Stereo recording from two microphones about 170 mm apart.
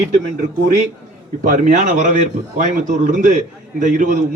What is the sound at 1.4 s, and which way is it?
A man's voice, 50° right (ahead or behind).